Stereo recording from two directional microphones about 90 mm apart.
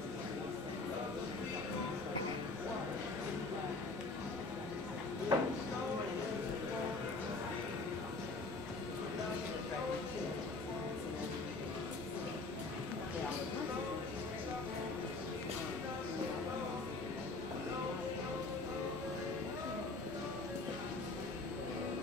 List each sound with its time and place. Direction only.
5.3 s music: 50° right (ahead or behind)